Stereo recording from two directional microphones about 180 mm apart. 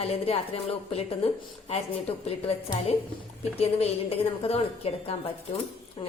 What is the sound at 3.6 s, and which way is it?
A woman's voice, 35° left (ahead or behind).